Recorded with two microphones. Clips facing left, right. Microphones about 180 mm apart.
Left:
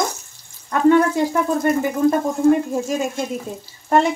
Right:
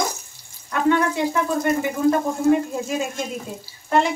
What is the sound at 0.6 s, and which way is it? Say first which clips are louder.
Speech: left 5 dB; 40° left (ahead or behind).